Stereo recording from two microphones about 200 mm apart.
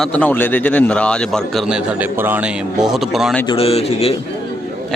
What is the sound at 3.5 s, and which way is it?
Speech, 30° left (ahead or behind).